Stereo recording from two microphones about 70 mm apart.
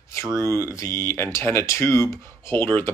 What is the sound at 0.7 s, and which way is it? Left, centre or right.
Speech, left.